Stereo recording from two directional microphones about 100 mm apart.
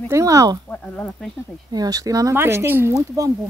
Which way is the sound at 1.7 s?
40° right (ahead or behind).